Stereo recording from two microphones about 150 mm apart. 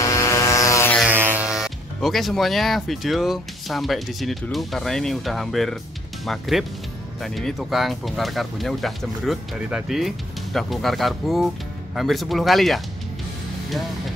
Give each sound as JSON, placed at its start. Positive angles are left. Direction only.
{"t": 0.0, "sound": "vehicle", "side_deg": 20}
{"t": 1.0, "sound": "speech", "side_deg": -15}